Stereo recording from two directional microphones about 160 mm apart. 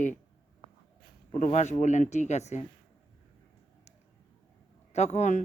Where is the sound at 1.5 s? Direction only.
45° left (ahead or behind).